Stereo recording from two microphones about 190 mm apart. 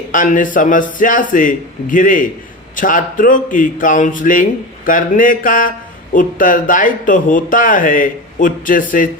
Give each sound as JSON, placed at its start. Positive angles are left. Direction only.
{"t": 0.1, "sound": "speech", "side_deg": 45}